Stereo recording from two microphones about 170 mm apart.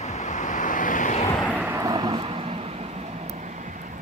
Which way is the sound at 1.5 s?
10° right (ahead or behind).